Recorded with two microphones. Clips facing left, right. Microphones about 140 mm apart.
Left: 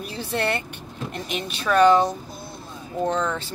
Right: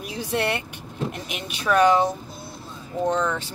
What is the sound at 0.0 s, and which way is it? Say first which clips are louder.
Speech: right 1 dB; 10° right (ahead or behind).